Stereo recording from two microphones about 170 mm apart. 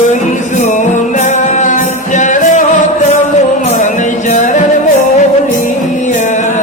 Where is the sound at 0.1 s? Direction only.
45° left (ahead or behind).